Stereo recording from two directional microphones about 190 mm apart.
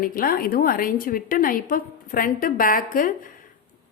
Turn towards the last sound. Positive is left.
turn(degrees=45)  # may be behind; listen again after turning